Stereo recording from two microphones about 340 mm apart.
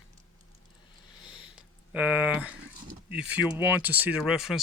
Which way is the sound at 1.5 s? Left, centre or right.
Centre.